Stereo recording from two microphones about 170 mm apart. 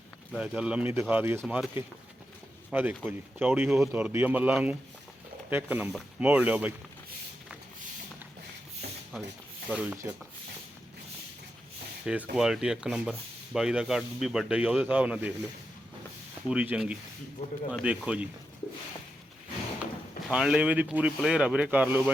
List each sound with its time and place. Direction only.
0.3 s speech: 5° right (ahead or behind)
9.6 s speech: 5° right (ahead or behind)
12.0 s speech: 5° right (ahead or behind)
16.5 s speech: 5° right (ahead or behind)
20.3 s speech: 5° right (ahead or behind)